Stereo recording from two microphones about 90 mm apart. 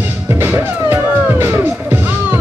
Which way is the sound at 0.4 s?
25° right (ahead or behind).